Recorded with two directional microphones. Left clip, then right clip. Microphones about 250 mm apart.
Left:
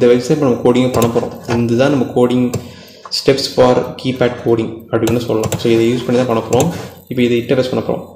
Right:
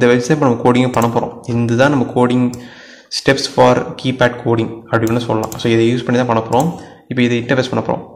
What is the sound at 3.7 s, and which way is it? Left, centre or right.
Speech, right.